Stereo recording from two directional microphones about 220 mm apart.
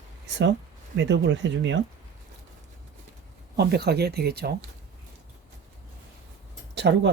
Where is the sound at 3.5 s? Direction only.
45° right (ahead or behind).